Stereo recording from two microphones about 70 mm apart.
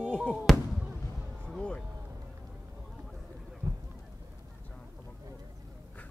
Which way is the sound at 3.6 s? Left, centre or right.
Right.